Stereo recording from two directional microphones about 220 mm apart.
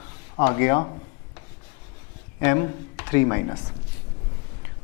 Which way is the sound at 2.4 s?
15° left (ahead or behind).